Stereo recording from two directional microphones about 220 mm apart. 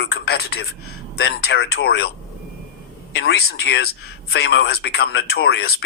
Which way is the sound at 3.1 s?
50° left (ahead or behind).